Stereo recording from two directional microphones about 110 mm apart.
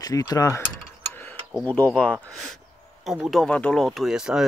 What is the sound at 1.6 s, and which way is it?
Speech, 10° left (ahead or behind).